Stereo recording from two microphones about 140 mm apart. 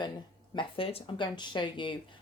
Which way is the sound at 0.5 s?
40° left (ahead or behind).